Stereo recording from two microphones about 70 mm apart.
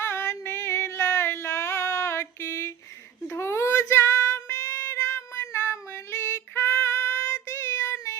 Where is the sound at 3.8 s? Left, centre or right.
Left.